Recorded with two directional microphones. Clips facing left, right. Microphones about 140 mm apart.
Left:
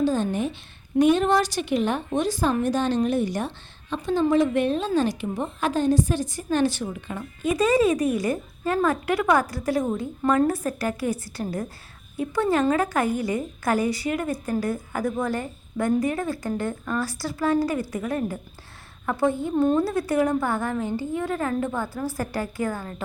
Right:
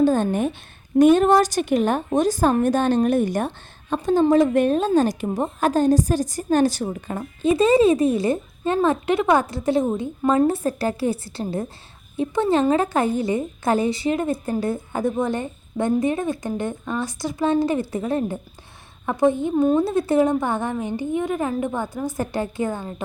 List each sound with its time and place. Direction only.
0.0 s a woman's voice: 55° right (ahead or behind)
7.4 s a woman's voice: 25° right (ahead or behind)